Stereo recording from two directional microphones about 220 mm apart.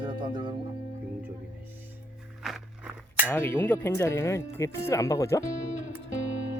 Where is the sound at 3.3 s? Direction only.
10° left (ahead or behind).